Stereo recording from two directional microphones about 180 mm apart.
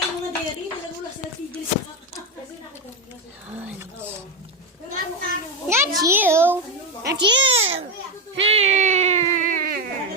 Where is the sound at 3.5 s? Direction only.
10° right (ahead or behind).